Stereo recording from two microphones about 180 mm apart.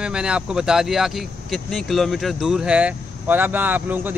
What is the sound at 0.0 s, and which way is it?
A man's voice, 5° right (ahead or behind).